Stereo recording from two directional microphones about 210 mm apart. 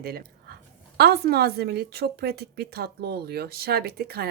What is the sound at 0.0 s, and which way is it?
A woman's voice, 45° right (ahead or behind).